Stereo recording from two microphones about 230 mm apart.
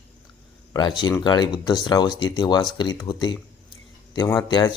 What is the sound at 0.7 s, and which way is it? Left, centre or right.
Speech, centre.